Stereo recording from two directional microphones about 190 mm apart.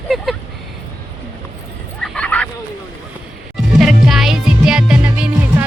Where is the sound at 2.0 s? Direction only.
5° left (ahead or behind).